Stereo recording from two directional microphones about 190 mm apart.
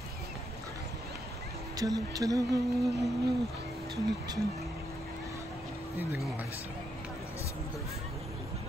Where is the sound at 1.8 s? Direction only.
20° right (ahead or behind).